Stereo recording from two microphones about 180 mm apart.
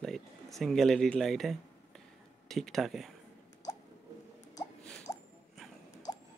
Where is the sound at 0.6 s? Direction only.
Centre (ahead or behind).